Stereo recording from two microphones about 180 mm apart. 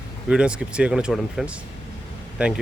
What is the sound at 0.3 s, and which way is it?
Speech, 5° right (ahead or behind).